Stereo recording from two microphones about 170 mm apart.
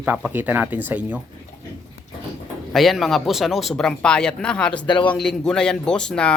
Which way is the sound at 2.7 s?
Centre (ahead or behind).